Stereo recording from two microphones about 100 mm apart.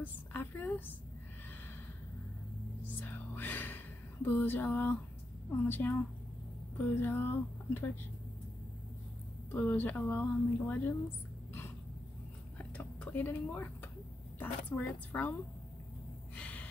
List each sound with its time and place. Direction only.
0.0 s a woman's voice: 20° left (ahead or behind)
3.0 s a sound: 20° left (ahead or behind)
5.7 s speech: 20° left (ahead or behind)
7.0 s speech: 20° left (ahead or behind)
9.5 s speech: 15° left (ahead or behind)
12.5 s a sound: 15° left (ahead or behind)
14.4 s speech: 15° left (ahead or behind)
16.3 s gasp: 15° left (ahead or behind)